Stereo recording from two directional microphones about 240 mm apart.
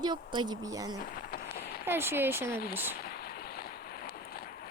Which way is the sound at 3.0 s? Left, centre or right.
Left.